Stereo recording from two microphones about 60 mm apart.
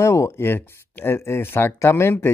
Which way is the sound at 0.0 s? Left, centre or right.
Left.